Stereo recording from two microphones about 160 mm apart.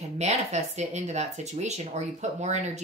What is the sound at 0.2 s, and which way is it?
A woman's voice, 45° right (ahead or behind).